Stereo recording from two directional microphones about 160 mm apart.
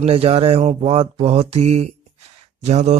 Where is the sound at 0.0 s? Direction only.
35° right (ahead or behind).